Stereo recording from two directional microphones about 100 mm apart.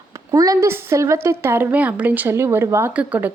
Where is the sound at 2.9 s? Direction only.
15° right (ahead or behind).